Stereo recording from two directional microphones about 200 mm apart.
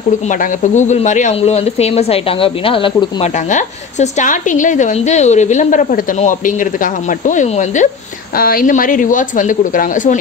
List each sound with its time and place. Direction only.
0.3 s a woman's voice: 40° left (ahead or behind)
3.4 s a woman's voice: 35° left (ahead or behind)